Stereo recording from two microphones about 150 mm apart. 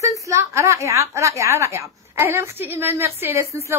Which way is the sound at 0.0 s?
20° right (ahead or behind).